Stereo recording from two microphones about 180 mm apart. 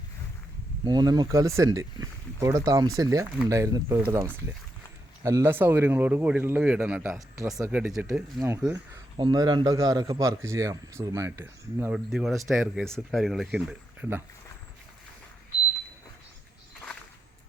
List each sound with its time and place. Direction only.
0.9 s a man's voice: 25° right (ahead or behind)
9.1 s a man's voice: 25° right (ahead or behind)
12.1 s speech: centre (ahead or behind)